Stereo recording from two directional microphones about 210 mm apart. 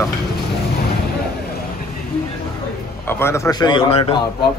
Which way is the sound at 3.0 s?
10° left (ahead or behind).